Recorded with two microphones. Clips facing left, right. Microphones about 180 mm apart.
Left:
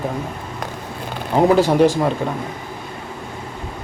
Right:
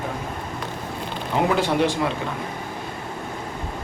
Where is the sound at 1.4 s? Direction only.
40° left (ahead or behind).